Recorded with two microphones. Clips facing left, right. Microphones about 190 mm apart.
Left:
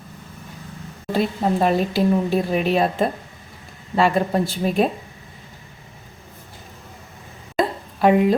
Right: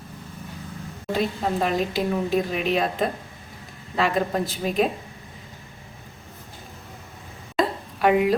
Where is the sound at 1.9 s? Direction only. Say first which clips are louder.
Left 4 dB; 35° left (ahead or behind).